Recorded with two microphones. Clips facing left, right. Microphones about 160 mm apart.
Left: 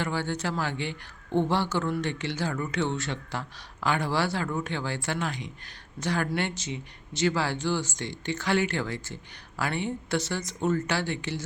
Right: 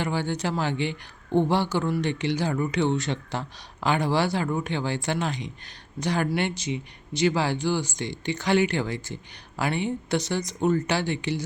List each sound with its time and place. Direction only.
0.0 s a man's voice: 15° right (ahead or behind)